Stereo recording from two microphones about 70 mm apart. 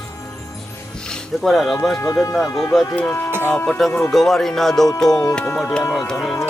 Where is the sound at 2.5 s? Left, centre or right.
Left.